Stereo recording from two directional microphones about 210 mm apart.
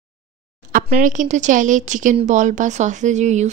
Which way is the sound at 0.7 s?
35° right (ahead or behind).